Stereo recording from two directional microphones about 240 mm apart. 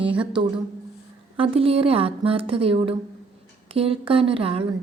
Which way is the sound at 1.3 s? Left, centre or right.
Right.